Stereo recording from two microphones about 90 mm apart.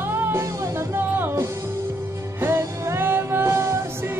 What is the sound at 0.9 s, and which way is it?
Music, 20° right (ahead or behind).